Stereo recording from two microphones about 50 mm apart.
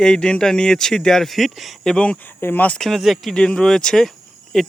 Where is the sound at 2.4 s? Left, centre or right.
Left.